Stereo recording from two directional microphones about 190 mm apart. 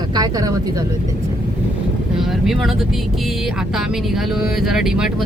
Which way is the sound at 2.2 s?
Centre (ahead or behind).